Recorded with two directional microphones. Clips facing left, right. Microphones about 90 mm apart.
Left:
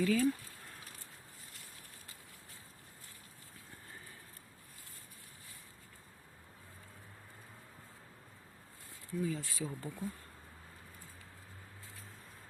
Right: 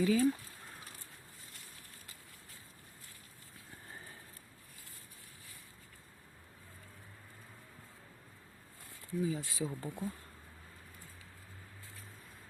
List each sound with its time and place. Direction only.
0.0 s speech: 20° right (ahead or behind)
9.2 s speech: 20° right (ahead or behind)